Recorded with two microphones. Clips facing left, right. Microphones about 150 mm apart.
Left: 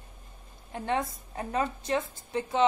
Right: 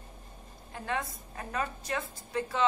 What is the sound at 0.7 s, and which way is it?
A woman's voice, 25° left (ahead or behind).